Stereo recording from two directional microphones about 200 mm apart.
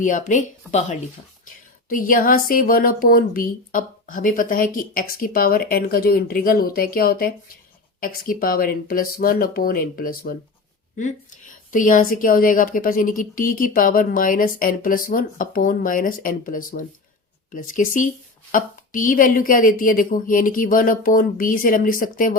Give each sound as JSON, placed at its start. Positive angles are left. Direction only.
{"t": 0.0, "sound": "a woman's voice", "side_deg": 40}